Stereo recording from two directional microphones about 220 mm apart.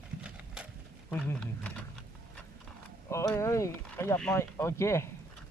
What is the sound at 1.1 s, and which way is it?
Speech, 5° left (ahead or behind).